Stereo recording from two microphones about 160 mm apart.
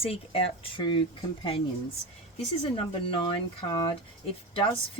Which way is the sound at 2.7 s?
35° left (ahead or behind).